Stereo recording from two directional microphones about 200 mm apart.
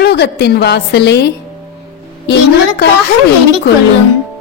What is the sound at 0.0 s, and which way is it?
A woman's voice, 55° left (ahead or behind).